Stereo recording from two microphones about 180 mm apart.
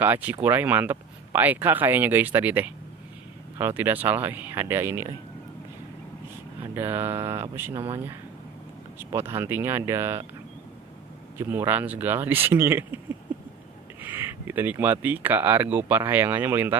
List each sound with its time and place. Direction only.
0.0 s speech: 10° right (ahead or behind)
6.7 s speech: 10° right (ahead or behind)
9.1 s speech: 15° right (ahead or behind)
11.3 s speech: 10° right (ahead or behind)
14.0 s speech: 10° right (ahead or behind)